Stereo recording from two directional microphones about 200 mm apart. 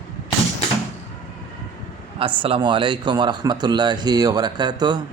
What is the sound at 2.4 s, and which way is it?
Speech, 25° right (ahead or behind).